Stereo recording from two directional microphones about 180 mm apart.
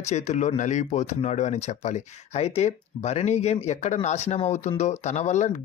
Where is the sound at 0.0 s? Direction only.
40° left (ahead or behind).